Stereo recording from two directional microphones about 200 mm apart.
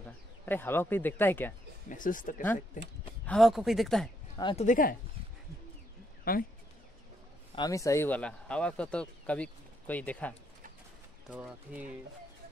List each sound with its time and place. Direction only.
0.0 s speech: 10° left (ahead or behind)
1.9 s speech: 40° left (ahead or behind)
3.3 s speech: centre (ahead or behind)
4.4 s speech: 25° left (ahead or behind)
4.6 s speech: 45° left (ahead or behind)
6.3 s speech: 45° left (ahead or behind)
7.5 s speech: 20° left (ahead or behind)
11.2 s speech: 5° right (ahead or behind)